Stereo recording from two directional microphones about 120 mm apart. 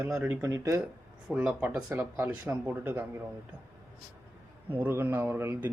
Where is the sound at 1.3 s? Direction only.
10° right (ahead or behind).